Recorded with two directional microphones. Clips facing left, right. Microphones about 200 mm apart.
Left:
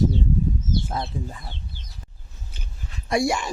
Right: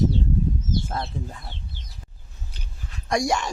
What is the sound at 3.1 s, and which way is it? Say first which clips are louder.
Speech: left 1 dB; 5° left (ahead or behind).